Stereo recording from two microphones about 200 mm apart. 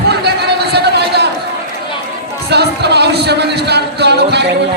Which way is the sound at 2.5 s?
55° right (ahead or behind).